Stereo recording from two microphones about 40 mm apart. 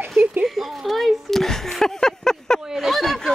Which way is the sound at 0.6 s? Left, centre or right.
Centre.